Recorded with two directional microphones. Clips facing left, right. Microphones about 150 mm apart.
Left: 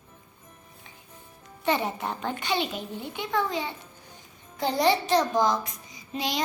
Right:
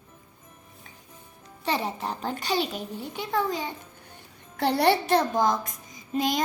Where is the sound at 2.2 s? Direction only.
40° right (ahead or behind).